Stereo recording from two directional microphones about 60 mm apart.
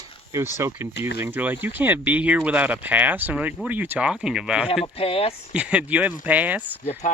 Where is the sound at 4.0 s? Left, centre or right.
Centre.